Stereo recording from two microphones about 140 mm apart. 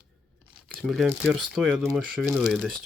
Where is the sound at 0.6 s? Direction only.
5° left (ahead or behind).